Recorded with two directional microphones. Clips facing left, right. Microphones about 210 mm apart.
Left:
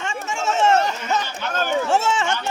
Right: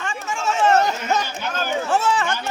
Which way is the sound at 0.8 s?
40° right (ahead or behind).